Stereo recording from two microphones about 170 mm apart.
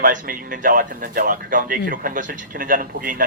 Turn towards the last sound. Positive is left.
turn(degrees=-55)  # may be behind; listen again after turning